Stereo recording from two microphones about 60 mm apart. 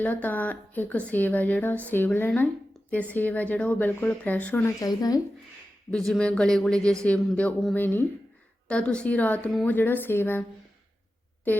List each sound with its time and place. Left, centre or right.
0.0 s a woman's voice: left
4.8 s speech: left
5.9 s speech: centre
6.1 s a sound: centre
7.8 s a woman's voice: left
8.6 s a woman's voice: centre; by 10.4 s left